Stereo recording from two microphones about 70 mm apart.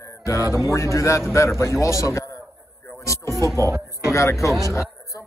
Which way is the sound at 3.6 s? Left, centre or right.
Right.